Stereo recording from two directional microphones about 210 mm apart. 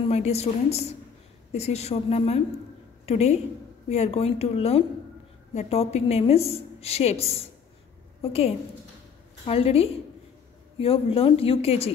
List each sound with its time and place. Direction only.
0.1 s a woman's voice: 30° left (ahead or behind)